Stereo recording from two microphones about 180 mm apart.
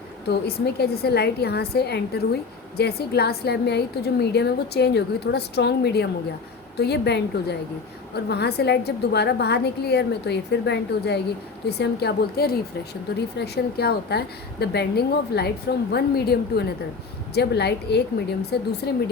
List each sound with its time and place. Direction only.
0.3 s a woman's voice: 65° left (ahead or behind)